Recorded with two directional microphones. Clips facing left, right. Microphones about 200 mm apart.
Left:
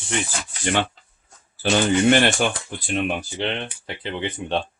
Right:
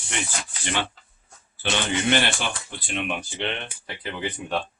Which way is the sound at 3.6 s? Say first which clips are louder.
Left 3 dB; 25° left (ahead or behind).